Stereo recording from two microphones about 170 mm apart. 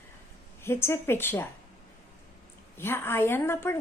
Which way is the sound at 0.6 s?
15° left (ahead or behind).